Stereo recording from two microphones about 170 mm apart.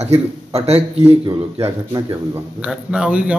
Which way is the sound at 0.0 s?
35° right (ahead or behind).